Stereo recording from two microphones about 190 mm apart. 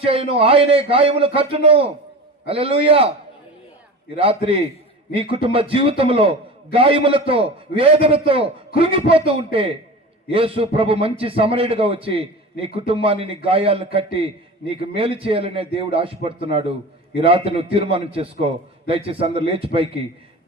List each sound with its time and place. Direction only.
0.0 s a man's voice: 30° right (ahead or behind)
4.1 s a man's voice: 30° right (ahead or behind)